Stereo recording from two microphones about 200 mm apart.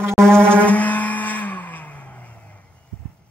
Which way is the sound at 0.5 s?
5° left (ahead or behind).